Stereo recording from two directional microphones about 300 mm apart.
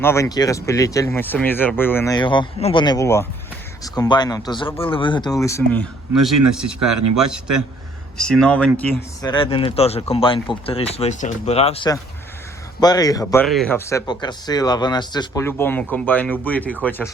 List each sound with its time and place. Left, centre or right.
0.0 s speech: centre
6.8 s speech: right
7.2 s speech: centre